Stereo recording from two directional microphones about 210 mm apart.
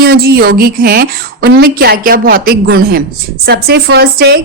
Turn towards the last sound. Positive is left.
turn(degrees=-50)  # may be behind; listen again after turning